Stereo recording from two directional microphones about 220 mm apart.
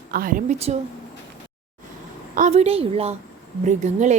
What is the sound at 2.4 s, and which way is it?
A woman's voice, 30° right (ahead or behind).